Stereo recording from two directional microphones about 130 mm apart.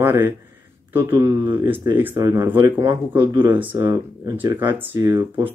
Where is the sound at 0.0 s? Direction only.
15° right (ahead or behind).